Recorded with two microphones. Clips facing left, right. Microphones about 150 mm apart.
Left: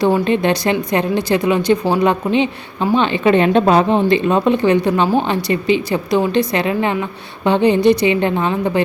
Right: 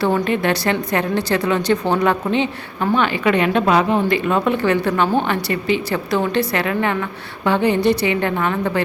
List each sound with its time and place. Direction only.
0.0 s speech: 10° left (ahead or behind)